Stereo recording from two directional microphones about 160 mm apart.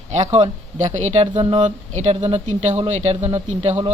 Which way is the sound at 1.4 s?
30° right (ahead or behind).